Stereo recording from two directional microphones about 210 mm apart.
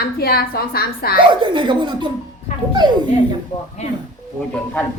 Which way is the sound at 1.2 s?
20° right (ahead or behind).